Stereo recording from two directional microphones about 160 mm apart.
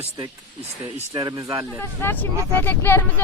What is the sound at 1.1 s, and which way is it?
Speech, 25° right (ahead or behind).